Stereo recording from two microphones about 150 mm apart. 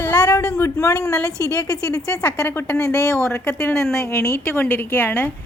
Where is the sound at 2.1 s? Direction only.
10° left (ahead or behind).